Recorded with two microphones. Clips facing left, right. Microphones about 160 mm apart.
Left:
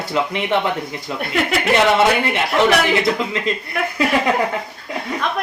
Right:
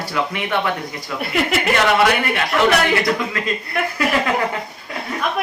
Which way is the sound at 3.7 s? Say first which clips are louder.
Right 2 dB; centre (ahead or behind).